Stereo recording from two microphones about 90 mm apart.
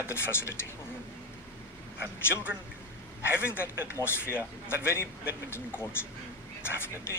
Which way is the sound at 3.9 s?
25° left (ahead or behind).